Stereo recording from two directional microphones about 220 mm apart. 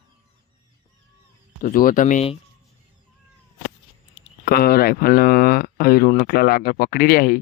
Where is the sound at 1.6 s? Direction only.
40° left (ahead or behind).